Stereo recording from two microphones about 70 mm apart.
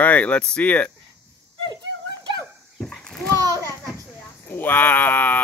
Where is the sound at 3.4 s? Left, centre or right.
Right.